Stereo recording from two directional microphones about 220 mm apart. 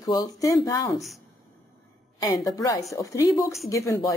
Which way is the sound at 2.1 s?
15° left (ahead or behind).